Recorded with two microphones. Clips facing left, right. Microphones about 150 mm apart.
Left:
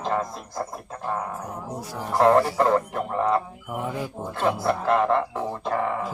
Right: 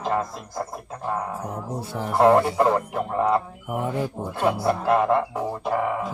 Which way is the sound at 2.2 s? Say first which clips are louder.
Right 1 dB; 5° right (ahead or behind).